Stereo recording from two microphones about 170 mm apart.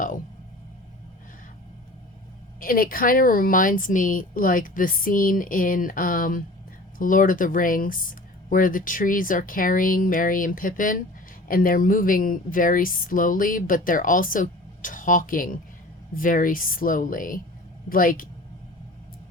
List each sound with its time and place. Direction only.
2.6 s speech: 55° left (ahead or behind)